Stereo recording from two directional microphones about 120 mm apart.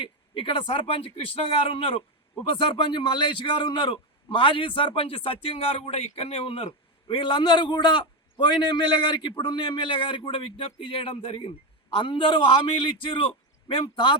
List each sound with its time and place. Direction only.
0.0 s a man's voice: 45° left (ahead or behind)